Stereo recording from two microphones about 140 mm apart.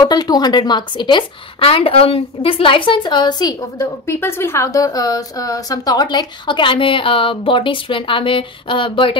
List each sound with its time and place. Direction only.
0.0 s a woman's voice: 30° left (ahead or behind)